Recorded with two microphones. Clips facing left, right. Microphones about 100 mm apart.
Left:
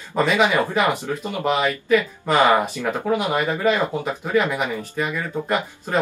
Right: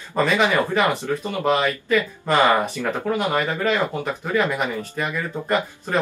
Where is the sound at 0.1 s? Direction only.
10° left (ahead or behind).